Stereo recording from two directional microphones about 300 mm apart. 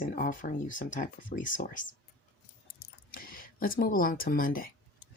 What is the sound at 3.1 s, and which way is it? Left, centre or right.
Speech, left.